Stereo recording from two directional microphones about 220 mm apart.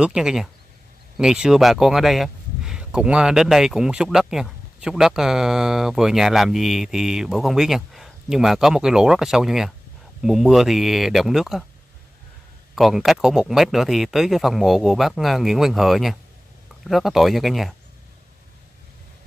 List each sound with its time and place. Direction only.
0.0 s speech: 5° right (ahead or behind)
12.7 s speech: centre (ahead or behind)